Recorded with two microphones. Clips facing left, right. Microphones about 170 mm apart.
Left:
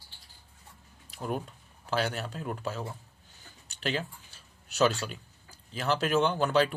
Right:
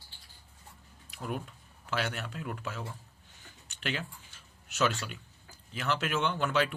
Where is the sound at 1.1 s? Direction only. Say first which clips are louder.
Left 3 dB; 35° left (ahead or behind).